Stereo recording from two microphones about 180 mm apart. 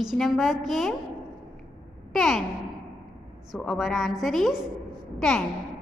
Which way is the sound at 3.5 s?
Centre (ahead or behind).